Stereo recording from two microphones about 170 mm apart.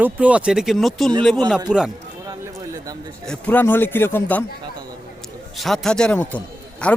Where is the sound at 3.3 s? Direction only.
10° left (ahead or behind).